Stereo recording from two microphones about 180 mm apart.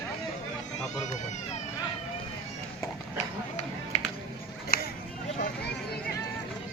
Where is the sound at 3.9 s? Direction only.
40° left (ahead or behind).